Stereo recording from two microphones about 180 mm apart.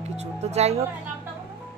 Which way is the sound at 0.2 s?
35° right (ahead or behind).